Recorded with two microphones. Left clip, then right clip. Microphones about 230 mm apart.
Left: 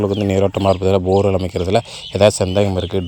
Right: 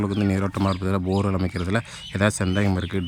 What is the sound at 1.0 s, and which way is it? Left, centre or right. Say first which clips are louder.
Speech: left 11 dB; centre.